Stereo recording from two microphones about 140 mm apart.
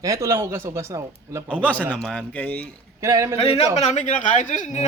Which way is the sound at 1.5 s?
10° left (ahead or behind).